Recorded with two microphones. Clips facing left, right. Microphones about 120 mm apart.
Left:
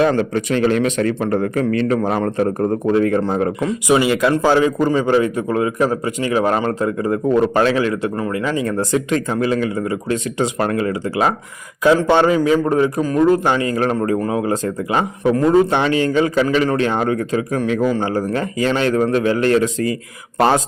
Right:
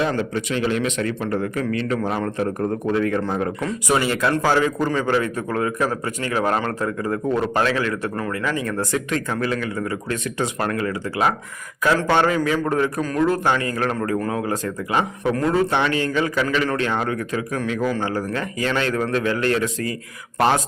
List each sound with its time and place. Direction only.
0.2 s a man's voice: 50° left (ahead or behind); by 3.5 s 30° left (ahead or behind)
3.6 s a man's voice: 15° left (ahead or behind)